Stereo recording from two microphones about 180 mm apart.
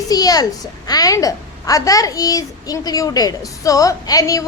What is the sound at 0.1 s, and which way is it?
A woman's voice, 20° left (ahead or behind).